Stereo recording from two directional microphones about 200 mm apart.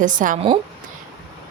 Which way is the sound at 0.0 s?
40° right (ahead or behind).